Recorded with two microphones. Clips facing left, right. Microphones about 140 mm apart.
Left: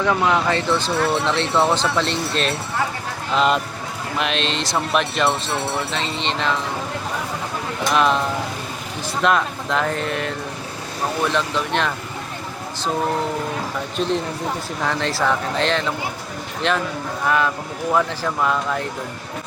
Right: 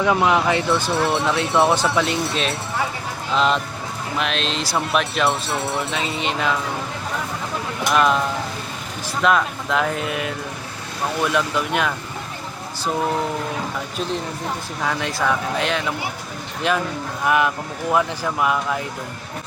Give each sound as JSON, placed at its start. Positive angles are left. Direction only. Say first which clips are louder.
{"t": 0.0, "sound": "speech", "louder": "right 1 dB", "side_deg": -10}
{"t": 7.9, "sound": "speech", "louder": "even", "side_deg": 0}
{"t": 9.2, "sound": "speech", "louder": "right 1 dB", "side_deg": 0}
{"t": 14.8, "sound": "speech", "louder": "left 1 dB", "side_deg": -10}